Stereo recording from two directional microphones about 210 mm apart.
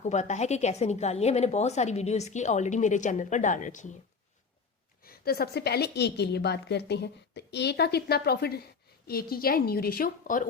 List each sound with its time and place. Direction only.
0.0 s a woman's voice: 35° left (ahead or behind)
5.0 s a woman's voice: 45° left (ahead or behind)